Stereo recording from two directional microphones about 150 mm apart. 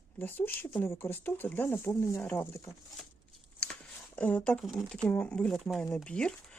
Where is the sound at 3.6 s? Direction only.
5° left (ahead or behind).